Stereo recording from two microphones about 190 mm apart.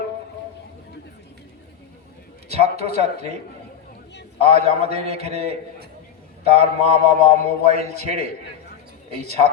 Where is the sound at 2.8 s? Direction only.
35° right (ahead or behind).